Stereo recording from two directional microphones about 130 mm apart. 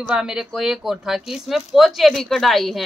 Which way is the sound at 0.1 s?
5° right (ahead or behind).